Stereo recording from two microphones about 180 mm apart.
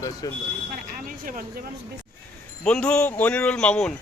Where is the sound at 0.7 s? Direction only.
50° right (ahead or behind).